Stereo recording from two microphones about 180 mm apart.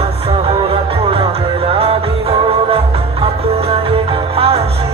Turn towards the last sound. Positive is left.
turn(degrees=-30)  # may be behind; listen again after turning